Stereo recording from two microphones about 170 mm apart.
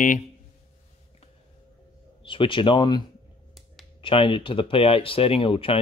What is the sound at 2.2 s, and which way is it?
Speech, 30° left (ahead or behind).